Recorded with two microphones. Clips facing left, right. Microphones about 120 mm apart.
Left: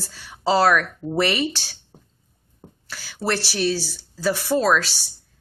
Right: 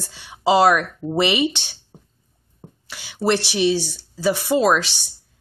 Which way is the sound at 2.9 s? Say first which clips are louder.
Right 5 dB; 15° right (ahead or behind).